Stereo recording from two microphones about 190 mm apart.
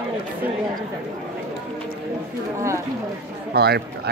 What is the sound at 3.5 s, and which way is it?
Speech, 55° right (ahead or behind).